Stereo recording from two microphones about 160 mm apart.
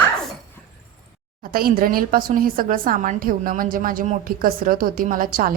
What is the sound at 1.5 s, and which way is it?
A woman's voice, 65° right (ahead or behind).